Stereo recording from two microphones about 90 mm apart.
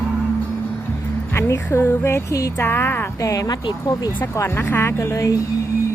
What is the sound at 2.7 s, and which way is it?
Speech, 25° left (ahead or behind).